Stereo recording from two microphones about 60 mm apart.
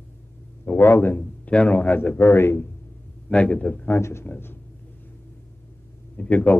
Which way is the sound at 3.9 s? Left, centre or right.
Left.